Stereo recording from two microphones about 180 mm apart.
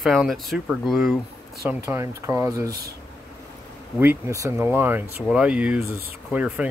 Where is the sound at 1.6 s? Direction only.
15° right (ahead or behind).